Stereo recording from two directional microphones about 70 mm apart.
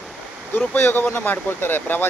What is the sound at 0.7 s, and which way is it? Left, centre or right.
Speech, left.